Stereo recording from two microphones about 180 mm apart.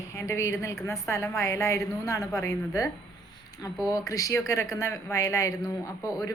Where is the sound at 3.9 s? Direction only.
20° left (ahead or behind).